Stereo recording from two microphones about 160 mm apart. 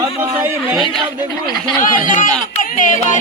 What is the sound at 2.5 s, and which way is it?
Music, 55° left (ahead or behind).